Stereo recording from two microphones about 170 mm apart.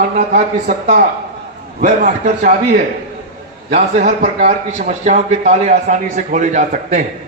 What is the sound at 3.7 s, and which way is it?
A man's voice, 45° right (ahead or behind).